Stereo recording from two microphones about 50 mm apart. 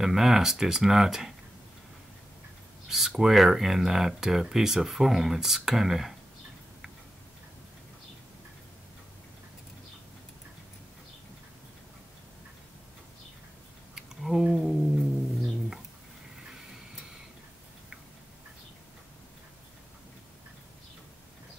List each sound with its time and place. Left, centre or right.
0.0 s speech: centre
2.9 s speech: centre
14.2 s a sound: centre
16.3 s vehicle: centre